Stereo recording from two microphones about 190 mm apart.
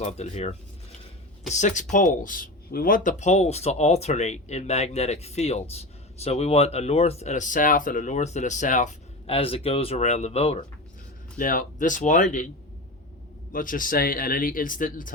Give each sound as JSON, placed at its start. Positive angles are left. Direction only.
{"t": 0.0, "sound": "speech", "side_deg": 35}
{"t": 11.3, "sound": "speech", "side_deg": 45}
{"t": 13.5, "sound": "speech", "side_deg": 45}